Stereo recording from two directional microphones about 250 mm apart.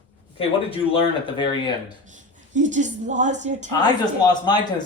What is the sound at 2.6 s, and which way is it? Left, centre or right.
A woman's voice, right.